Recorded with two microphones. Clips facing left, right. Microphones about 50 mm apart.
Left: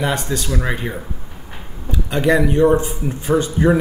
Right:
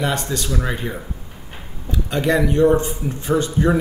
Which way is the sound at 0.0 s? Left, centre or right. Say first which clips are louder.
Left 1 dB; centre.